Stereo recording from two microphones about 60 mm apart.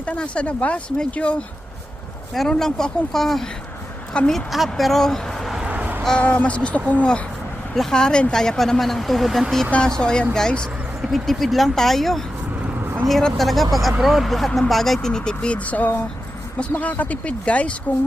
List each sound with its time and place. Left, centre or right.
0.0 s speech: centre
2.3 s speech: centre
5.7 s a sound: right
6.1 s speech: left
7.8 s speech: centre
9.7 s speech: centre
11.0 s speech: centre; by 17.7 s left